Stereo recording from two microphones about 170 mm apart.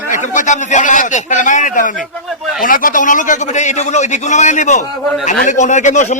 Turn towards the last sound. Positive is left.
turn(degrees=45)  # may be behind; listen again after turning